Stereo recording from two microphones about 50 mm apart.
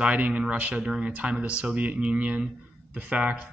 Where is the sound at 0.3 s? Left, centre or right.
Right.